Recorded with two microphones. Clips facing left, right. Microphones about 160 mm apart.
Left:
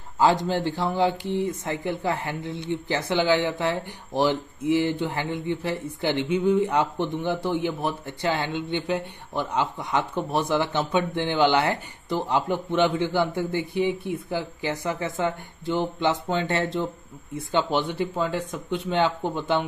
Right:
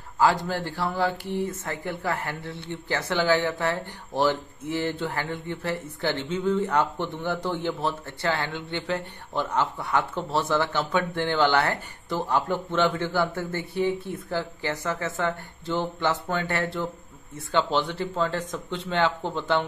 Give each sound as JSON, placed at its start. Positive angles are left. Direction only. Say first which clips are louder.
{"t": 0.2, "sound": "speech", "louder": "left 2 dB", "side_deg": 20}